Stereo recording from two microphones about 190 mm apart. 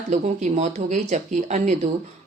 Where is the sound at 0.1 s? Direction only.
40° right (ahead or behind).